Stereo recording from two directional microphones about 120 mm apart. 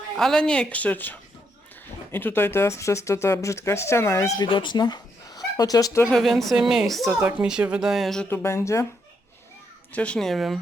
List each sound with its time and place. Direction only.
0.2 s a woman's voice: 5° left (ahead or behind); by 4.3 s 25° left (ahead or behind)
4.4 s speech: 40° left (ahead or behind)
6.1 s a woman's voice: centre (ahead or behind)
8.3 s speech: 20° left (ahead or behind)
9.9 s a woman's voice: 10° left (ahead or behind)